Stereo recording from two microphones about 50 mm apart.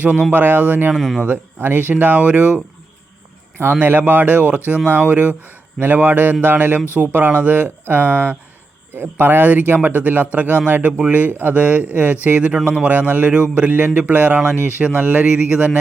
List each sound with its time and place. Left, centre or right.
0.0 s speech: right
0.9 s speech: centre
1.2 s speech: right
3.8 s speech: right
11.5 s speech: right